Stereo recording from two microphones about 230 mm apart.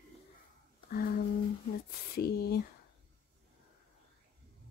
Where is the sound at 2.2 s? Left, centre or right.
Left.